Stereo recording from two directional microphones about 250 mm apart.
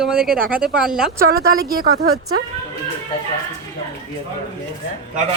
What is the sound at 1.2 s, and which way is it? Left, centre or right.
Speech, right.